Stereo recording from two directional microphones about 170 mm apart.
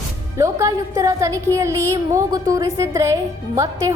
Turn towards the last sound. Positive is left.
turn(degrees=-15)  # may be behind; listen again after turning